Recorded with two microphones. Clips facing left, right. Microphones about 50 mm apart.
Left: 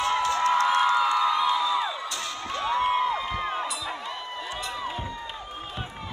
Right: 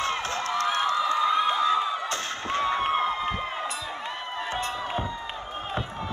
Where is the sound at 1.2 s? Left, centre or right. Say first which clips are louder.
Even; right.